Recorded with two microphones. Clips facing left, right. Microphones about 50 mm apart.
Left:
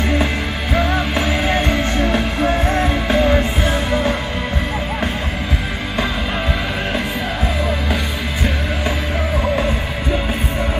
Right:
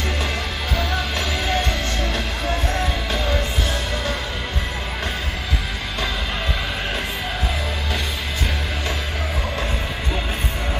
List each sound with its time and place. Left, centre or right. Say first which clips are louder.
0.7 s music: left 7 dB; left